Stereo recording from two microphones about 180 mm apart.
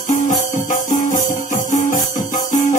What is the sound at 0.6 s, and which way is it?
Music, 45° left (ahead or behind).